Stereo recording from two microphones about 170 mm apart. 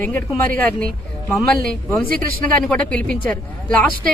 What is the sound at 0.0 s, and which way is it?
Speech, 15° left (ahead or behind).